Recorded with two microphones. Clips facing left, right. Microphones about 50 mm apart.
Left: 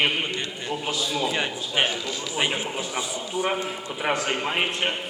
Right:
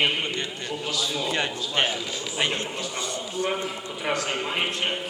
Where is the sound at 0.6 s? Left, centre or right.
Centre.